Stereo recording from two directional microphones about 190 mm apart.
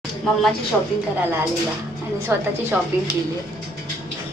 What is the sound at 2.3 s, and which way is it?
Speech, 10° right (ahead or behind).